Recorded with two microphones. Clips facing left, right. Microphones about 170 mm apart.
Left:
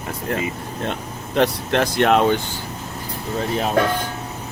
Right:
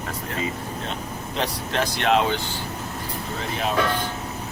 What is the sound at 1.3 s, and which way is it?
Speech, 60° left (ahead or behind).